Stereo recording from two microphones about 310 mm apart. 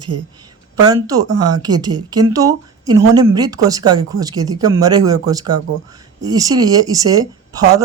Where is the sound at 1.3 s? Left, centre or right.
Right.